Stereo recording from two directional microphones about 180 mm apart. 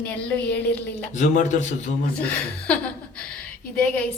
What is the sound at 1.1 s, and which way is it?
Speech, 40° left (ahead or behind).